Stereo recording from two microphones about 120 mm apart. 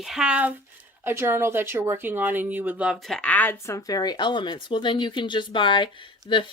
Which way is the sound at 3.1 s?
10° left (ahead or behind).